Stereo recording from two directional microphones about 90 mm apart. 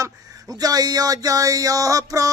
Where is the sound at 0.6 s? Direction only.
45° right (ahead or behind).